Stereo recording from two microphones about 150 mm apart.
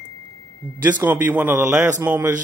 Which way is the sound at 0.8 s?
10° right (ahead or behind).